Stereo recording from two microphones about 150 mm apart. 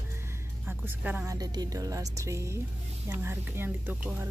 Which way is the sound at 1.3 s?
25° right (ahead or behind).